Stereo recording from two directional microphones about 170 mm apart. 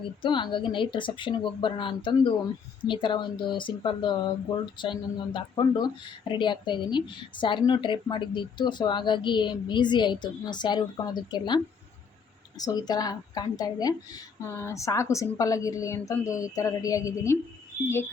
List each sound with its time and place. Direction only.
0.2 s speech: 25° left (ahead or behind)